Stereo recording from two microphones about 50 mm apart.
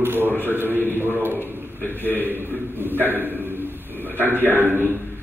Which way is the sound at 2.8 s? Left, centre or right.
Right.